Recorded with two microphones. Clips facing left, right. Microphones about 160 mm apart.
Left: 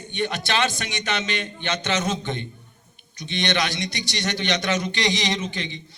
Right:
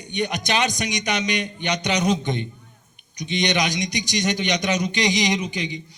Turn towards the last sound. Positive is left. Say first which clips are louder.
# right 3 dB
turn(degrees=-15)  # may be behind; listen again after turning